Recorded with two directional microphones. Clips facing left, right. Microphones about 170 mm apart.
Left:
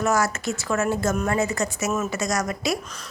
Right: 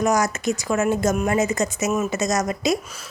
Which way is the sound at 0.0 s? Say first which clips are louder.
Right 2 dB; 15° right (ahead or behind).